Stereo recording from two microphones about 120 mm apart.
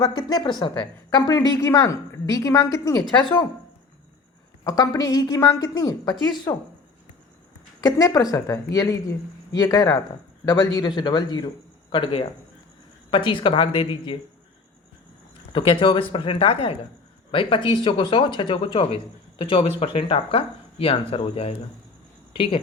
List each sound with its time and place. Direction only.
0.0 s a woman's voice: 40° left (ahead or behind)
4.6 s a woman's voice: 30° left (ahead or behind)
7.8 s a woman's voice: 30° left (ahead or behind)
15.5 s speech: 45° left (ahead or behind)